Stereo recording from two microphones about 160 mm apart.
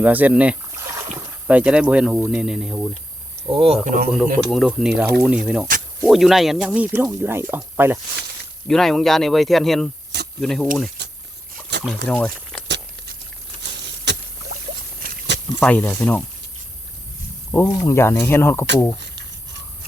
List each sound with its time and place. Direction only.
0.0 s speech: 10° right (ahead or behind)
3.4 s speech: 30° right (ahead or behind)
3.8 s speech: 60° right (ahead or behind)
4.4 s speech: centre (ahead or behind)
8.6 s speech: 5° left (ahead or behind)
11.0 s a sound: 90° right
11.7 s liquid: 90° right
12.0 s speech: 10° left (ahead or behind)
12.6 s tearing: 90° right
13.6 s rowboat: 90° right
15.6 s speech: 10° left (ahead or behind)
17.5 s speech: 15° left (ahead or behind)
18.9 s a sound: 90° right